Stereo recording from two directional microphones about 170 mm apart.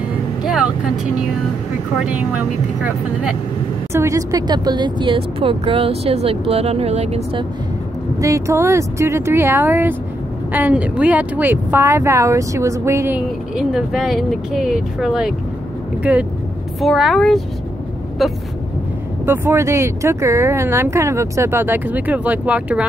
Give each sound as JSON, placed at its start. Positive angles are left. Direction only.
{"t": 0.4, "sound": "vehicle", "side_deg": -5}
{"t": 2.0, "sound": "speech", "side_deg": -5}
{"t": 8.2, "sound": "speech", "side_deg": -15}
{"t": 13.6, "sound": "speech", "side_deg": -5}
{"t": 19.2, "sound": "speech", "side_deg": -15}